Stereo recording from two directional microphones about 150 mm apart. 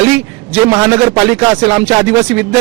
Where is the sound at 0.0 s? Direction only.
10° right (ahead or behind).